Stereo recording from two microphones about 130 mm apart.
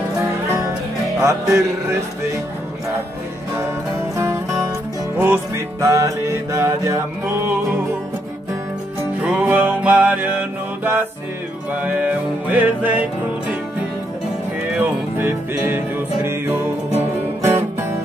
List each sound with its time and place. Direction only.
1.2 s music: 25° right (ahead or behind)
3.5 s music: 20° right (ahead or behind)
9.2 s music: 10° right (ahead or behind)
14.8 s music: 15° right (ahead or behind)